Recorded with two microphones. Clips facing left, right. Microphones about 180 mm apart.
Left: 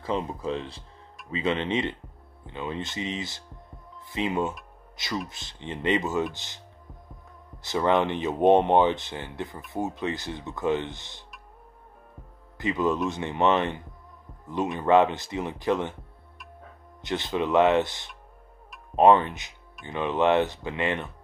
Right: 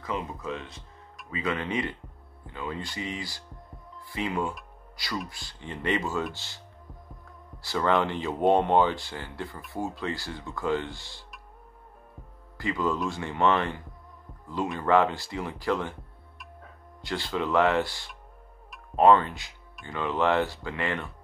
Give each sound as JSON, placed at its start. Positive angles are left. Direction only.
{"t": 0.0, "sound": "speech", "side_deg": 30}
{"t": 7.6, "sound": "speech", "side_deg": 20}
{"t": 12.5, "sound": "speech", "side_deg": 20}
{"t": 17.0, "sound": "speech", "side_deg": 20}